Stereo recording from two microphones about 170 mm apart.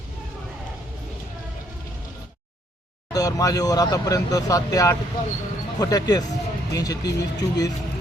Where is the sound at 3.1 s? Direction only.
20° left (ahead or behind).